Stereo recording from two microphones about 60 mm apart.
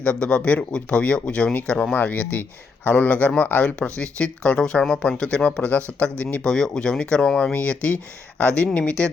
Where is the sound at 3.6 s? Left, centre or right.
Centre.